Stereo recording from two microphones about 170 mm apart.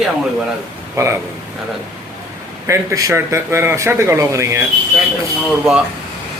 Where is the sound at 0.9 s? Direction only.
15° right (ahead or behind).